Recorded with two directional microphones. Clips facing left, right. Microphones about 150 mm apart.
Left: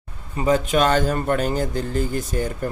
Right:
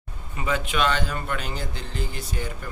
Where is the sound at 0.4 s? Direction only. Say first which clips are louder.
Left 7 dB; 40° left (ahead or behind).